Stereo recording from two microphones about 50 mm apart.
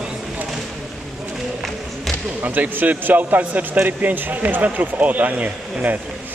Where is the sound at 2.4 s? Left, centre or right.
Right.